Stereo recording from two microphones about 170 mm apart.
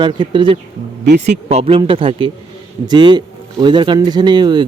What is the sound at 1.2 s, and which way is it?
A man's voice, 40° right (ahead or behind).